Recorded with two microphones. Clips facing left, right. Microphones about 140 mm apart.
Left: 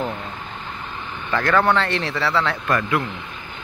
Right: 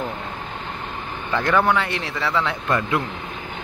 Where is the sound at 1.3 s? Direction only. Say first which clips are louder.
Left 1 dB; 15° right (ahead or behind).